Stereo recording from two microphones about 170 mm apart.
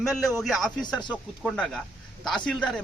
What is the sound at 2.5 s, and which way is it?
Speech, 5° left (ahead or behind).